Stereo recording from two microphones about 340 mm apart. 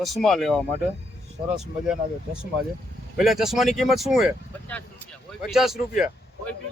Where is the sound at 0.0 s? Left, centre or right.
Centre.